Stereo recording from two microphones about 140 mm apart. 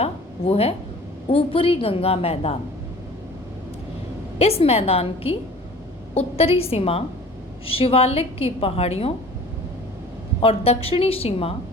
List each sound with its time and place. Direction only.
0.0 s a sound: 45° left (ahead or behind)
1.3 s a woman's voice: 45° left (ahead or behind)
4.4 s a woman's voice: 45° left (ahead or behind)
10.4 s a woman's voice: 45° left (ahead or behind)